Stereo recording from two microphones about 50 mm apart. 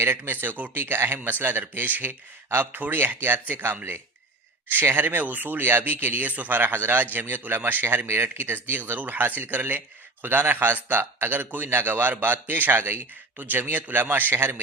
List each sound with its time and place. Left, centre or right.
0.0 s speech: right
4.9 s speech: right
6.6 s speech: right
13.3 s speech: right